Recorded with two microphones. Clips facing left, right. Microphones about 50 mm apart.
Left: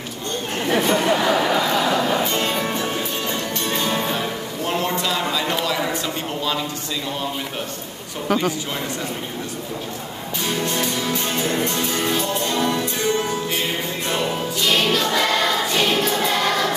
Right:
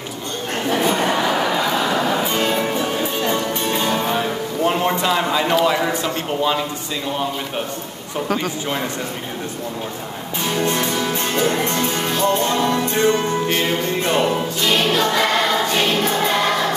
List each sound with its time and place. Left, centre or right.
0.8 s a sound: centre
1.9 s music: centre
4.6 s a sound: right
10.6 s music: right
14.7 s music: centre
15.2 s choir: centre